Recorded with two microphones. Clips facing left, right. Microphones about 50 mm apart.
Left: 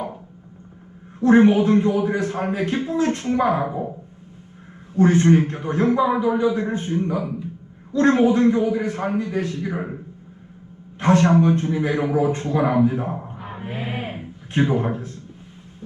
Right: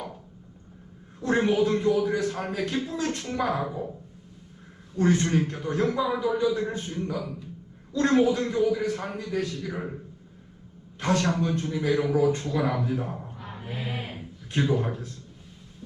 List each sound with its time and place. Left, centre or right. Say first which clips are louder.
1.2 s a man's voice: left 8 dB; left
4.9 s a man's voice: left 7 dB; left
11.0 s a man's voice: left 9 dB; left